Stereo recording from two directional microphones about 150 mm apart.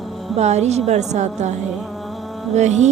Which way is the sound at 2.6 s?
50° right (ahead or behind).